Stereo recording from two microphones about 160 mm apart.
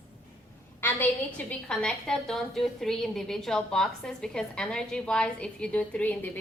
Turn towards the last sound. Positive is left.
turn(degrees=10)  # may be behind; listen again after turning